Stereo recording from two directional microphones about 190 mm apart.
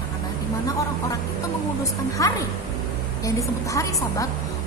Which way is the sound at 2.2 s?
15° left (ahead or behind).